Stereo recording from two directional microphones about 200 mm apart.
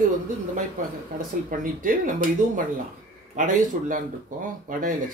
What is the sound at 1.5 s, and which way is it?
Speech, 45° right (ahead or behind).